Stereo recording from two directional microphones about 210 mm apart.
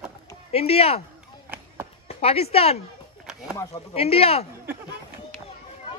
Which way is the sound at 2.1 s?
30° left (ahead or behind).